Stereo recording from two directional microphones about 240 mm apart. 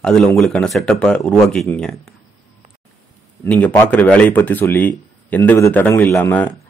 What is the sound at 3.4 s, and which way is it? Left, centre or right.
A man's voice, centre.